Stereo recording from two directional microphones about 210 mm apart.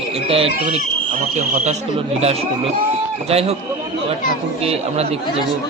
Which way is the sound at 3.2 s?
30° right (ahead or behind).